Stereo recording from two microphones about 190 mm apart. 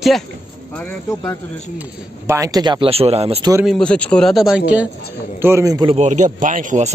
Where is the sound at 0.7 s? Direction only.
15° left (ahead or behind).